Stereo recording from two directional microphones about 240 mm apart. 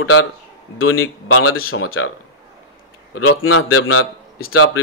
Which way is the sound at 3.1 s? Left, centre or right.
Left.